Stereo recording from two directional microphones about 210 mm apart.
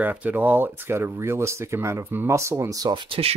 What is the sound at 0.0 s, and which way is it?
Speech, 5° right (ahead or behind).